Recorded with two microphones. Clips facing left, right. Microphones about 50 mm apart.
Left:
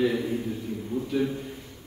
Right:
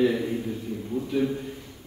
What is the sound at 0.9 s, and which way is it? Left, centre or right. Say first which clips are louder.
Speech: right 1 dB; centre.